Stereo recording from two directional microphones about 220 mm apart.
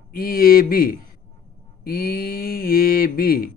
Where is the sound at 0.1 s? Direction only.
40° left (ahead or behind).